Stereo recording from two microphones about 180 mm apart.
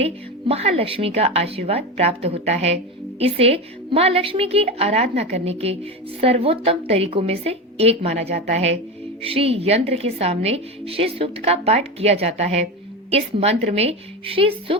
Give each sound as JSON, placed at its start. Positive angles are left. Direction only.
{"t": 0.0, "sound": "a woman's voice", "side_deg": -35}